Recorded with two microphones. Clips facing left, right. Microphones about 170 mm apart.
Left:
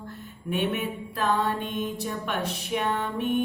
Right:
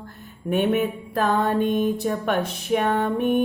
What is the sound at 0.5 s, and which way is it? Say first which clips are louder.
Mantra: right 7 dB; 45° right (ahead or behind).